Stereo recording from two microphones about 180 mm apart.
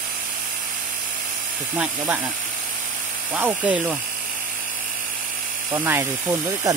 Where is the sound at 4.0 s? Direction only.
50° right (ahead or behind).